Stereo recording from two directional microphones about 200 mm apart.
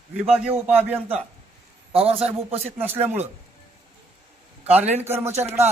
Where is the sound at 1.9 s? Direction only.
30° right (ahead or behind).